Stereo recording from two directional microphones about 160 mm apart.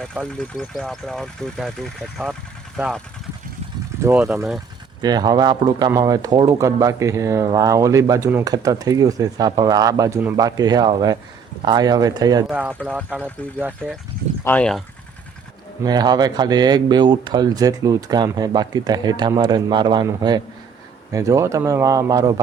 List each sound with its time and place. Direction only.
0.0 s speech: 5° left (ahead or behind)
4.0 s speech: 15° right (ahead or behind)
12.5 s speech: 10° right (ahead or behind)
14.4 s speech: 10° left (ahead or behind)
15.8 s speech: 25° right (ahead or behind)